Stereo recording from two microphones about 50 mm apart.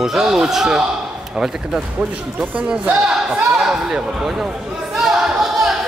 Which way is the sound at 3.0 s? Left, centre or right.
Centre.